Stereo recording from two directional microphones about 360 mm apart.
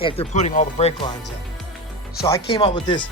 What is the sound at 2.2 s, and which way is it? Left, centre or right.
Speech, centre.